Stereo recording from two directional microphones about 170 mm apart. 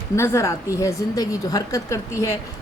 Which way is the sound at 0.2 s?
15° left (ahead or behind).